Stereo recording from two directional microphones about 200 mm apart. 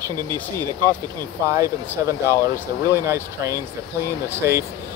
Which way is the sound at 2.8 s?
15° right (ahead or behind).